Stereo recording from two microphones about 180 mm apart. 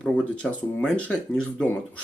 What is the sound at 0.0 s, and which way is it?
Speech, 5° left (ahead or behind).